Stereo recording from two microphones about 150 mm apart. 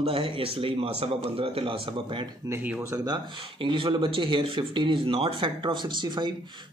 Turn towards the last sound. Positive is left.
turn(degrees=-30)  # may be behind; listen again after turning